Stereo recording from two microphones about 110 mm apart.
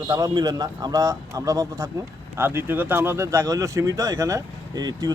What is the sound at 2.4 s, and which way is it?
Speech, 20° right (ahead or behind).